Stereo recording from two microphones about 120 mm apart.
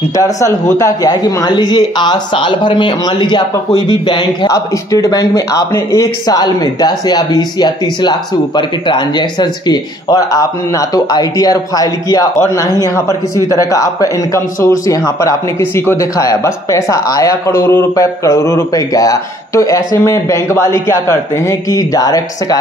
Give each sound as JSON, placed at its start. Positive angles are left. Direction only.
{"t": 0.1, "sound": "a man's voice", "side_deg": 30}
{"t": 4.5, "sound": "a man's voice", "side_deg": 30}